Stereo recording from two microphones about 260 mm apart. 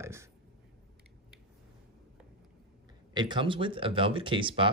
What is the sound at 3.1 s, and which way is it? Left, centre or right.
Speech, centre.